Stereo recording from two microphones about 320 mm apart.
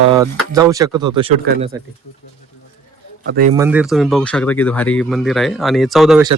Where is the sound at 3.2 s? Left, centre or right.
Right.